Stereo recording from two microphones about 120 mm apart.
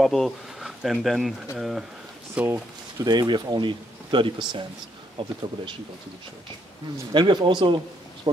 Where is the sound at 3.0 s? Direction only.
35° right (ahead or behind).